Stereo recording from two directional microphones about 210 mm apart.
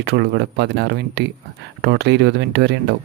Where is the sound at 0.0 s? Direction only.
50° right (ahead or behind).